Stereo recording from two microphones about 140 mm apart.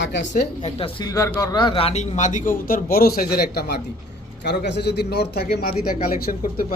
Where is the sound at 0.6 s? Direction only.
40° left (ahead or behind).